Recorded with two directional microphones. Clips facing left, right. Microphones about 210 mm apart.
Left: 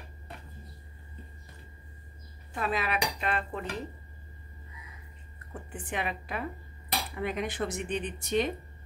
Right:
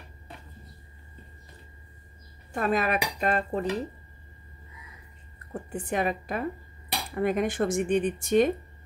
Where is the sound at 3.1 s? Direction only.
40° right (ahead or behind).